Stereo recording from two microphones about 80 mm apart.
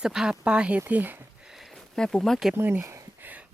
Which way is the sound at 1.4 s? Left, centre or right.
Centre.